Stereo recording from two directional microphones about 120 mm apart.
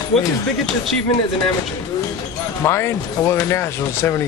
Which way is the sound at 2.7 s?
20° left (ahead or behind).